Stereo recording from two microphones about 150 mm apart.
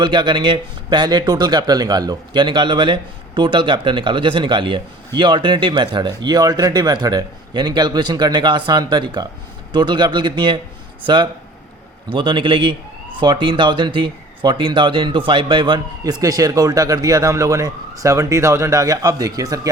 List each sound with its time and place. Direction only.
0.0 s speech: 30° right (ahead or behind)